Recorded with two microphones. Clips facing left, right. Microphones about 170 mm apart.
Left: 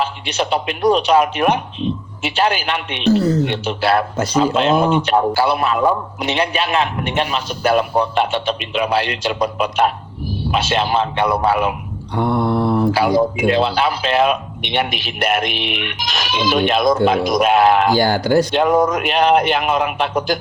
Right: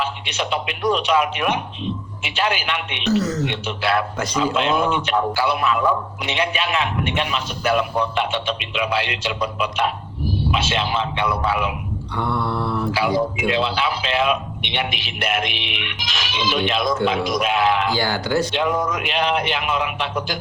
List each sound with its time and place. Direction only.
0.0 s a man's voice: 35° left (ahead or behind)